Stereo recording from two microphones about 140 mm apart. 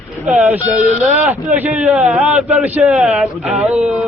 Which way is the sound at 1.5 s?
10° right (ahead or behind).